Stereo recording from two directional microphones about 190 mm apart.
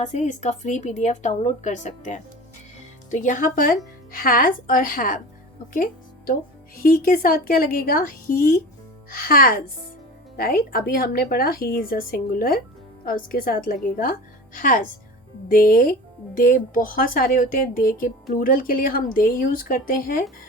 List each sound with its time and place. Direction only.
0.0 s a woman's voice: 40° left (ahead or behind)
5.7 s music: 45° left (ahead or behind)
6.8 s speech: 45° left (ahead or behind)